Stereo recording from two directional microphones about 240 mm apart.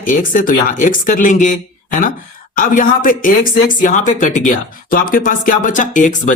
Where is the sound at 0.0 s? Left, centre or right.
Left.